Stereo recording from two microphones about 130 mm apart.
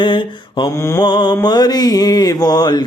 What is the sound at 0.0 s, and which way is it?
Mantra, 40° left (ahead or behind).